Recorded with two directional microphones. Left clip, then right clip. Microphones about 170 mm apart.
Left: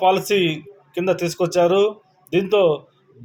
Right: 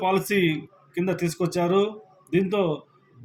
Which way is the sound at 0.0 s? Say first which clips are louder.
Left 6 dB; 30° left (ahead or behind).